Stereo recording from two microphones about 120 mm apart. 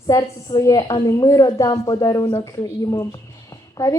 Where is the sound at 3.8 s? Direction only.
25° left (ahead or behind).